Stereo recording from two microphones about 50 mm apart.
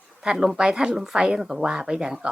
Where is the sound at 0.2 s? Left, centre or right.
Centre.